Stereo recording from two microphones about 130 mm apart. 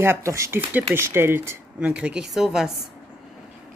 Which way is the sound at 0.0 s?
20° right (ahead or behind).